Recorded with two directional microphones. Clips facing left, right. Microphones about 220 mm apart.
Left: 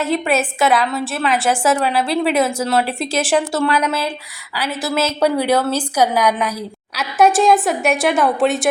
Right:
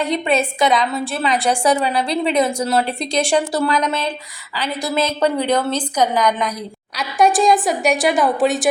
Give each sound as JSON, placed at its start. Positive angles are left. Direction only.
{"t": 0.0, "sound": "a woman's voice", "side_deg": 5}